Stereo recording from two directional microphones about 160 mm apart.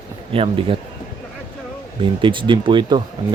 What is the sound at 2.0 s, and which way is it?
Speech, 30° right (ahead or behind).